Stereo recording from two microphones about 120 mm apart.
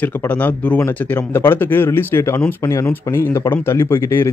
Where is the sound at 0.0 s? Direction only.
10° left (ahead or behind).